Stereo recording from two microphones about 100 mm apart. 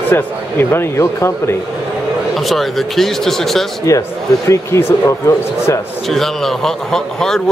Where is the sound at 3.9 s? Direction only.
35° left (ahead or behind).